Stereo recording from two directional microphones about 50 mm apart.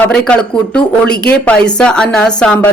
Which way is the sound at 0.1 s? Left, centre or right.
Centre.